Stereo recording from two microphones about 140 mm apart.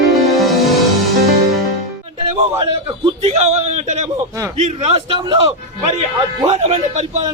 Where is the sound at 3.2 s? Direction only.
50° right (ahead or behind).